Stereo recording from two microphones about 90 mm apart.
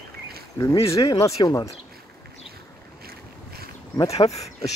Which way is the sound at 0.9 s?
35° left (ahead or behind).